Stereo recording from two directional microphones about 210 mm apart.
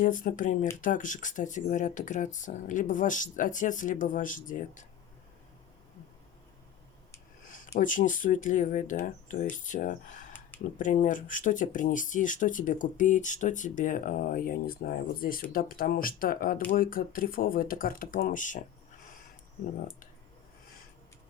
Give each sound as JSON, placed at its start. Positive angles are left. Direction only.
{"t": 0.0, "sound": "speech", "side_deg": 40}
{"t": 7.5, "sound": "speech", "side_deg": 40}